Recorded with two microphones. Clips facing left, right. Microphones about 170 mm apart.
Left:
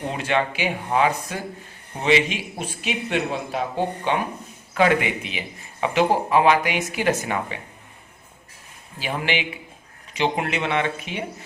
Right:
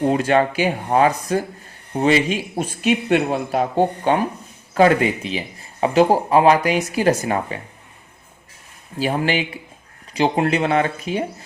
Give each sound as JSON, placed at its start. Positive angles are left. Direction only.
{"t": 0.1, "sound": "speech", "side_deg": -40}
{"t": 9.0, "sound": "speech", "side_deg": -40}